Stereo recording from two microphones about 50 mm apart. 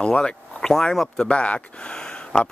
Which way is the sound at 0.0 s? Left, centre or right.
Centre.